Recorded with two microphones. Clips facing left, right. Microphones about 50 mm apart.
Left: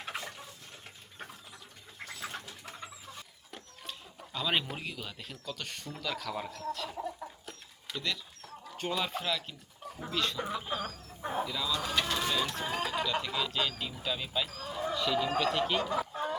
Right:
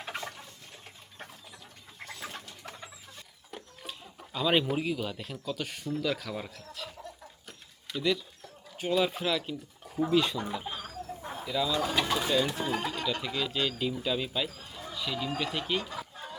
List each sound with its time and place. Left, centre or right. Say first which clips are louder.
0.0 s a sound: right 2 dB; centre
2.0 s bird: even; centre
2.7 s chicken: left 2 dB; centre
6.0 s speech: right 2 dB; centre
7.4 s bird: left 1 dB; centre
10.3 s speech: even; centre
13.2 s speech: right 1 dB; centre
15.8 s chicken: left 7 dB; centre